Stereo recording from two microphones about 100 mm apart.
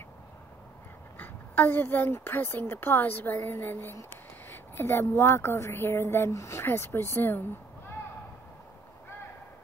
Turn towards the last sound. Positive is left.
turn(degrees=20)  # may be behind; listen again after turning